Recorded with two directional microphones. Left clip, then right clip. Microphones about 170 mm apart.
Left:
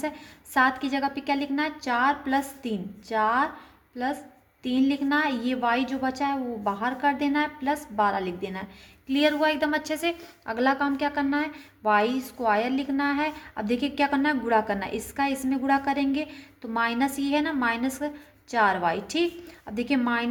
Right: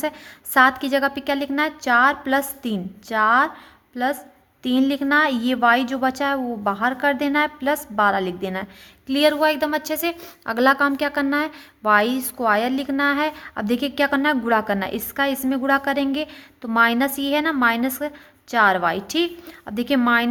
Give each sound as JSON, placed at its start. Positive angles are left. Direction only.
{"t": 0.5, "sound": "a woman's voice", "side_deg": -40}
{"t": 10.4, "sound": "a woman's voice", "side_deg": -35}